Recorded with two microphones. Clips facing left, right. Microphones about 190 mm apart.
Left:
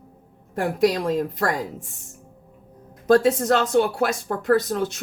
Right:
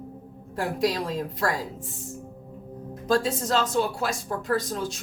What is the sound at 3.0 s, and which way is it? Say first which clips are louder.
Speech: left 7 dB; 60° left (ahead or behind).